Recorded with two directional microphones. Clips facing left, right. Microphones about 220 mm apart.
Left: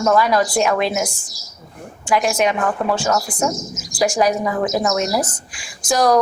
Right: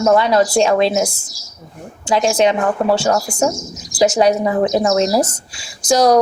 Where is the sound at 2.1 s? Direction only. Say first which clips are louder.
Right 3 dB; 30° right (ahead or behind).